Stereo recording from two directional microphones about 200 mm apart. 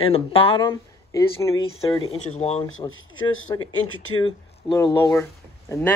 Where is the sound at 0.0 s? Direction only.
30° left (ahead or behind).